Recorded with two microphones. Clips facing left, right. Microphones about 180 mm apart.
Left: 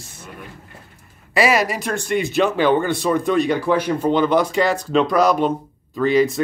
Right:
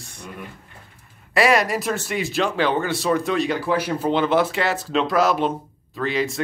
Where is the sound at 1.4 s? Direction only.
Centre (ahead or behind).